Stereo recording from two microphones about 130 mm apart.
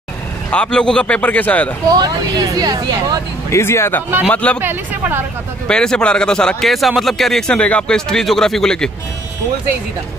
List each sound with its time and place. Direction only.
0.5 s a man's voice: 5° left (ahead or behind)
1.9 s speech: 30° right (ahead or behind)
3.5 s a man's voice: 20° left (ahead or behind)
4.6 s speech: 15° right (ahead or behind)
5.7 s speech: 5° left (ahead or behind)